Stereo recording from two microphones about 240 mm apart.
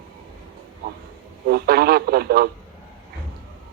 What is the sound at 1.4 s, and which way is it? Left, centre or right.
Speech, right.